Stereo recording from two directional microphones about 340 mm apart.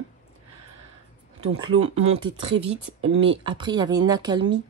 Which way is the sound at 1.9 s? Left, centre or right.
Centre.